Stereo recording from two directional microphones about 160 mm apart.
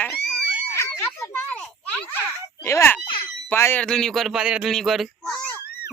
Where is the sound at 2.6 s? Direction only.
15° left (ahead or behind).